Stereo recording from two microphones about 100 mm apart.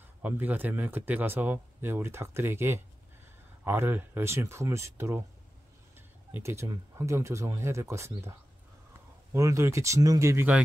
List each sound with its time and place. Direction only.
0.2 s speech: 15° right (ahead or behind)